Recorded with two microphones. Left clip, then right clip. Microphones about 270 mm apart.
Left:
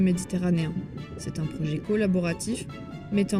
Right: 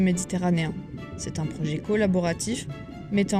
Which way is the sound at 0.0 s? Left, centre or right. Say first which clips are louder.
Right 2 dB; right.